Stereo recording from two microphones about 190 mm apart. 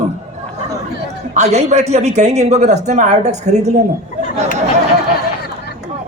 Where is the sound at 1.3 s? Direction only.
35° right (ahead or behind).